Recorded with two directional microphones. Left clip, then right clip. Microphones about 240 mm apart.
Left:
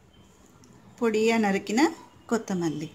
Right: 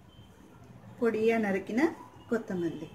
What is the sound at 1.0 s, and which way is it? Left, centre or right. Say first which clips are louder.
A woman's voice: left 4 dB; left.